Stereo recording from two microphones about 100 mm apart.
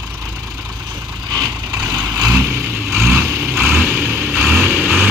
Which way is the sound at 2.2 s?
25° right (ahead or behind).